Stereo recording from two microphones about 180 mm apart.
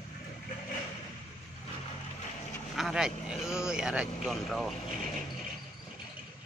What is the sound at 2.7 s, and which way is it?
Speech, centre (ahead or behind).